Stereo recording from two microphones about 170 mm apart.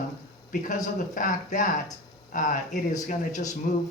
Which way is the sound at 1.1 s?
50° left (ahead or behind).